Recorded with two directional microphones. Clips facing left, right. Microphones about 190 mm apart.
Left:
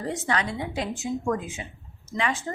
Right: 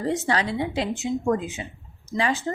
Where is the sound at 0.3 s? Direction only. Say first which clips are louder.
Right 3 dB; 30° right (ahead or behind).